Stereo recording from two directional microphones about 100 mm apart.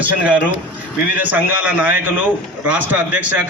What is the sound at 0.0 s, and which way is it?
A man's voice, 15° right (ahead or behind).